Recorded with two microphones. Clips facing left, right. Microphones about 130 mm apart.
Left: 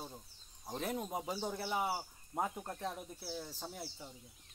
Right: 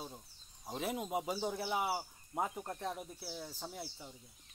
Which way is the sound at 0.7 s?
5° right (ahead or behind).